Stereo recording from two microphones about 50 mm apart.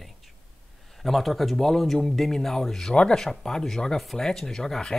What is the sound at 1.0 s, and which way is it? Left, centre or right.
Speech, centre.